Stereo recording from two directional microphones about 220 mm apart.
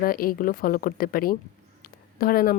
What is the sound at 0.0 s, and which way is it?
A woman's voice, 40° left (ahead or behind).